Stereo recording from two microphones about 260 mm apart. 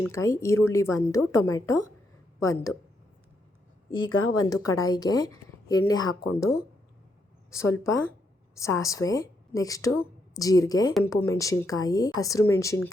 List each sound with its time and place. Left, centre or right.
0.0 s speech: centre
4.0 s speech: left
4.4 s speech: centre
7.5 s a woman's voice: centre